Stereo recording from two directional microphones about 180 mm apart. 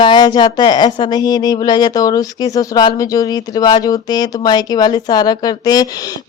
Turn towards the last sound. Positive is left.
turn(degrees=20)  # may be behind; listen again after turning